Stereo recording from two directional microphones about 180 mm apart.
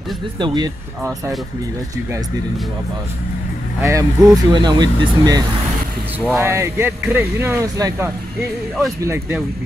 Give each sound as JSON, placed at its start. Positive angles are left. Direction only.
{"t": 0.4, "sound": "speech", "side_deg": -25}
{"t": 3.8, "sound": "speech", "side_deg": -15}